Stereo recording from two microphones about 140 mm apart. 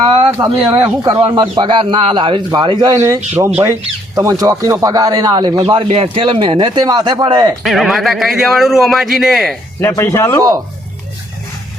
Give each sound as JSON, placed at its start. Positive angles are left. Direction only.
{"t": 0.3, "sound": "a man's voice", "side_deg": -30}
{"t": 7.6, "sound": "a man's voice", "side_deg": 0}
{"t": 9.9, "sound": "speech", "side_deg": 20}